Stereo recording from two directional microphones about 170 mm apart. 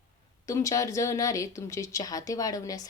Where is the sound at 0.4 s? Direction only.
20° left (ahead or behind).